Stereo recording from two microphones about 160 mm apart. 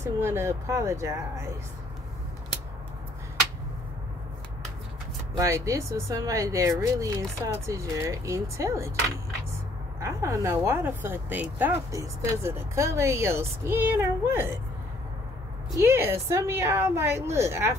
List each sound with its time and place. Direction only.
0.0 s speech: 15° right (ahead or behind)
5.4 s speech: 20° right (ahead or behind)
9.9 s speech: 20° right (ahead or behind)
15.8 s speech: 15° right (ahead or behind)